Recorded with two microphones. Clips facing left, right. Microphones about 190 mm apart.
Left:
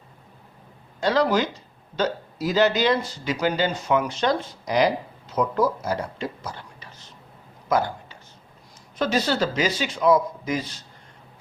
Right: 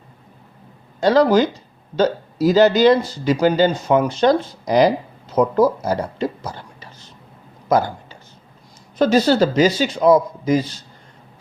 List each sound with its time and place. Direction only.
1.0 s speech: 40° right (ahead or behind)
9.0 s speech: 35° right (ahead or behind)